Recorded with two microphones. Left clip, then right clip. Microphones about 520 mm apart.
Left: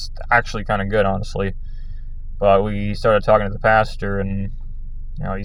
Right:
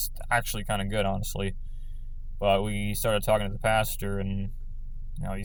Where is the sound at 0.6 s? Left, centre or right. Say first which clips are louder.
Left 10 dB; right.